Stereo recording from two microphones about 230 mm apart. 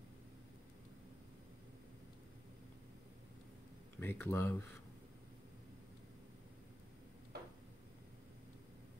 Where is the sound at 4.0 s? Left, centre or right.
Centre.